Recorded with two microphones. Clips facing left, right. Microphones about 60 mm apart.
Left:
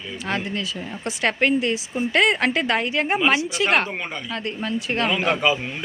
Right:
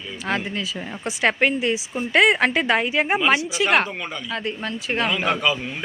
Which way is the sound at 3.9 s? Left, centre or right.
Left.